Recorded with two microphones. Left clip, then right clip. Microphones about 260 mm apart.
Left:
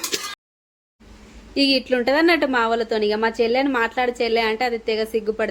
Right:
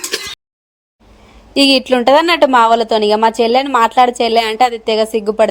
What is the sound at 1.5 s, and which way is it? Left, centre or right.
A woman's voice, right.